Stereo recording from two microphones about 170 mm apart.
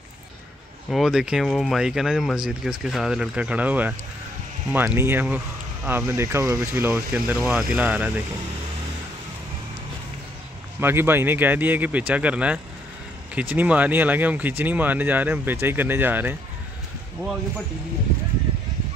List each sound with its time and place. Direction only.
0.8 s speech: centre (ahead or behind)
10.8 s speech: 15° right (ahead or behind)